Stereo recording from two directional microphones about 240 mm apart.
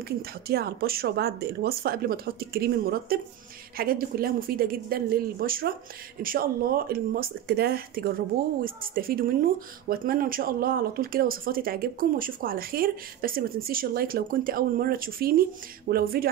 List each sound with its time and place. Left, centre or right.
0.5 s speech: right